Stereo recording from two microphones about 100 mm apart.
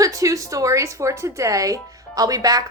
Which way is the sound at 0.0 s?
35° right (ahead or behind).